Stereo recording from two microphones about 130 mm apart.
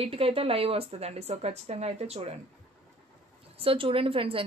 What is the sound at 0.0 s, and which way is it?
Speech, 45° right (ahead or behind).